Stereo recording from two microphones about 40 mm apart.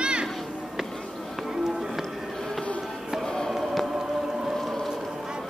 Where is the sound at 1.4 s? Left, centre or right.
Centre.